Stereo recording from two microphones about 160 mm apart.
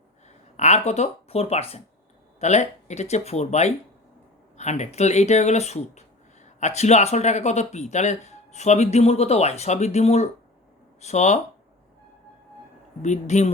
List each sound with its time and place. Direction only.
0.5 s speech: 45° left (ahead or behind)
13.0 s speech: 45° left (ahead or behind)